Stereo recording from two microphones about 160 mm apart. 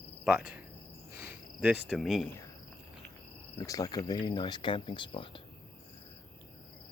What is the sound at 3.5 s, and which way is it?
Speech, 25° left (ahead or behind).